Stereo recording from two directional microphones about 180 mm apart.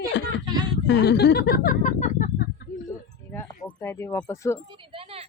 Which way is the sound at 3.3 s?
10° left (ahead or behind).